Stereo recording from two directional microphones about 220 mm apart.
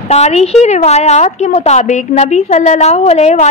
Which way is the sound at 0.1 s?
30° left (ahead or behind).